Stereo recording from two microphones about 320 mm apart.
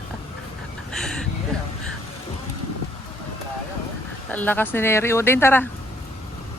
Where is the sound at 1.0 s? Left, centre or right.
Centre.